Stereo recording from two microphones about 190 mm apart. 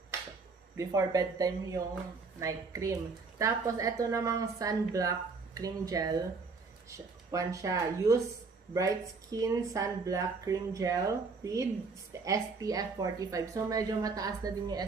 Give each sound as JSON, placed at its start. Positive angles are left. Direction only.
{"t": 0.7, "sound": "speech", "side_deg": -20}